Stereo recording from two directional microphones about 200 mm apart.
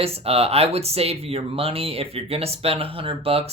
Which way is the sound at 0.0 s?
30° right (ahead or behind).